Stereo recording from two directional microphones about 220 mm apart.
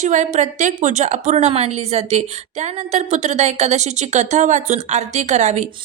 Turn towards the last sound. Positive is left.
turn(degrees=-30)  # may be behind; listen again after turning